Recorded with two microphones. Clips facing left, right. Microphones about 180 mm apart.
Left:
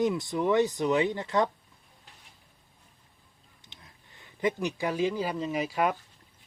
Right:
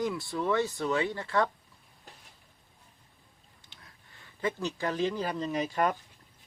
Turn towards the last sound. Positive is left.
turn(degrees=5)  # may be behind; listen again after turning